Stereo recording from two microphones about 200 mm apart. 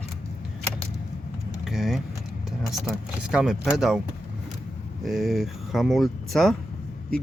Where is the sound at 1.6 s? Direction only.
Centre (ahead or behind).